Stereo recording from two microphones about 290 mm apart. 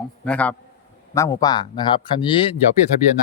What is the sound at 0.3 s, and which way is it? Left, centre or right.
Speech, centre.